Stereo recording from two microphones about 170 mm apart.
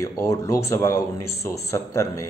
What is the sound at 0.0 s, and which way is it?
A man's voice, 20° left (ahead or behind).